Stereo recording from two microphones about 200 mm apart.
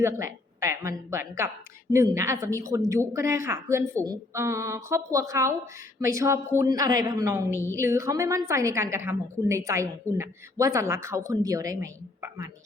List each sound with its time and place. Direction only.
0.0 s a woman's voice: 15° right (ahead or behind)